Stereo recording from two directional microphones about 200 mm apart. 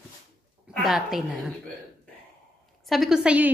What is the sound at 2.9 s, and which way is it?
Speech, centre (ahead or behind).